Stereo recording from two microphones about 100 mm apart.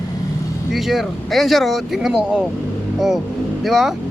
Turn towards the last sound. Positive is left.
turn(degrees=-5)  # may be behind; listen again after turning